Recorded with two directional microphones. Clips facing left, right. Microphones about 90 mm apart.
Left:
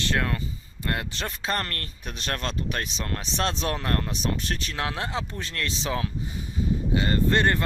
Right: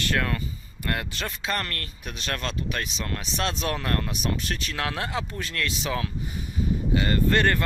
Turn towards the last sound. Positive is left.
turn(degrees=25)  # may be behind; listen again after turning